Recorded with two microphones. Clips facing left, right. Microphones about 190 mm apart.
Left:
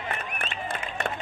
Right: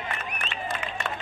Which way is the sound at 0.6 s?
60° left (ahead or behind).